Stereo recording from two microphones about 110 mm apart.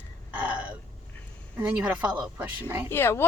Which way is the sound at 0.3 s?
10° right (ahead or behind).